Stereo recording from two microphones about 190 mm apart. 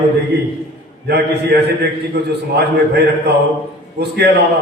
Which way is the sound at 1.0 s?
60° right (ahead or behind).